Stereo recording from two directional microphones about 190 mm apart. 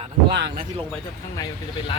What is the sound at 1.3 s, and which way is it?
Speech, 20° left (ahead or behind).